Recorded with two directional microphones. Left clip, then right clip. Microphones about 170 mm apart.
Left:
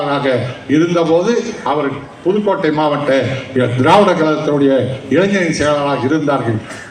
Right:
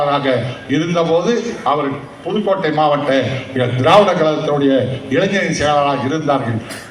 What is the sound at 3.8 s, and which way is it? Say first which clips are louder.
A man's voice: even; 40° right (ahead or behind).